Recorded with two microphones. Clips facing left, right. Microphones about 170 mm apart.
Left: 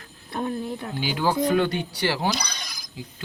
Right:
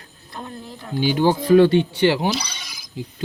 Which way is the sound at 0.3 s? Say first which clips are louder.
Left 7 dB; 60° left (ahead or behind).